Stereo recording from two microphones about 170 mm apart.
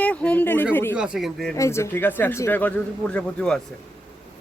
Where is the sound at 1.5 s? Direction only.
15° left (ahead or behind).